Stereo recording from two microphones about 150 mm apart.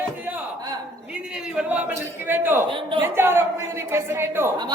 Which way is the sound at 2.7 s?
35° right (ahead or behind).